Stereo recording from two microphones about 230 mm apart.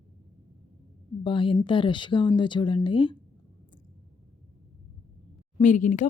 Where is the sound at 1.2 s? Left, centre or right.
Left.